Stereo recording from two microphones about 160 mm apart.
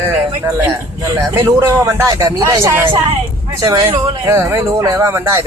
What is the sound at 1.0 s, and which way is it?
Speech, 20° right (ahead or behind).